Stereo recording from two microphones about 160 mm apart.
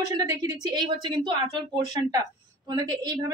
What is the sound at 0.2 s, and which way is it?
Speech, 25° right (ahead or behind).